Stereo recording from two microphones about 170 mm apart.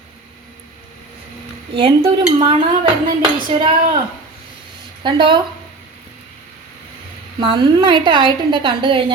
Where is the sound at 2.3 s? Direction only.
30° right (ahead or behind).